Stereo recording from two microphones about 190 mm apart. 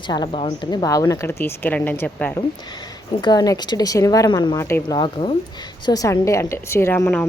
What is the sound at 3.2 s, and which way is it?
A woman's voice, 20° left (ahead or behind).